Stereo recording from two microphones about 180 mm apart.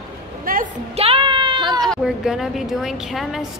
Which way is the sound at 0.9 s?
30° right (ahead or behind).